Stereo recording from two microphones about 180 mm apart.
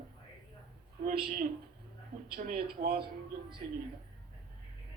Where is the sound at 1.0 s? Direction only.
55° right (ahead or behind).